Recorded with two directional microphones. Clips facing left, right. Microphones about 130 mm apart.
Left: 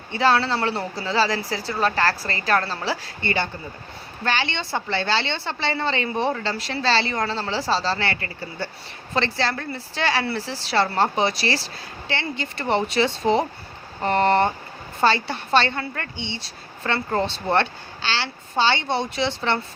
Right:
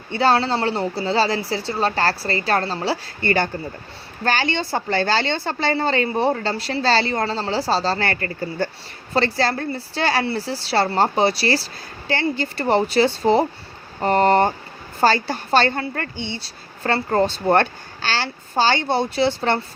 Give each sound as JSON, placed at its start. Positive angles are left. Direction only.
{"t": 0.1, "sound": "a woman's voice", "side_deg": -35}